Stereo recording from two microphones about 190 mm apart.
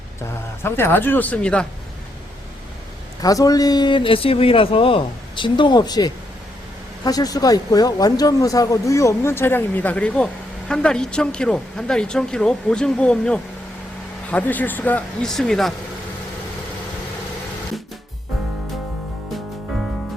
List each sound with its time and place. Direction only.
0.6 s speech: 10° left (ahead or behind)
3.2 s a man's voice: 20° left (ahead or behind); by 15.7 s centre (ahead or behind)